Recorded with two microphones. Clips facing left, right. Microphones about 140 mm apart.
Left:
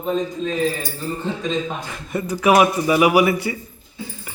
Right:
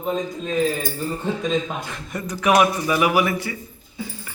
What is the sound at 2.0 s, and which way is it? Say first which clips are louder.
A man's voice: left 4 dB; 5° left (ahead or behind).